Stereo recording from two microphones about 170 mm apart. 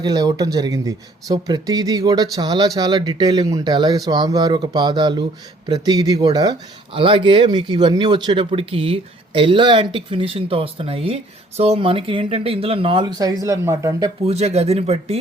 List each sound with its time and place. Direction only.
0.0 s speech: 25° right (ahead or behind)
14.3 s speech: 40° right (ahead or behind)